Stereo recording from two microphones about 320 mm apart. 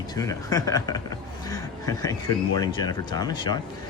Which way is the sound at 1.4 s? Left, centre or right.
Centre.